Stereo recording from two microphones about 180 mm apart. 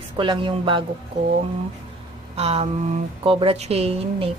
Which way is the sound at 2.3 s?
35° right (ahead or behind).